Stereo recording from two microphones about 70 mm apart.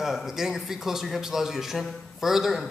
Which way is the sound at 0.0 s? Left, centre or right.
Centre.